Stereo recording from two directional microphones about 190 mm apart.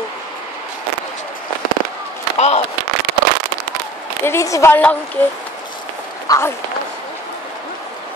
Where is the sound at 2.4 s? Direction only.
35° left (ahead or behind).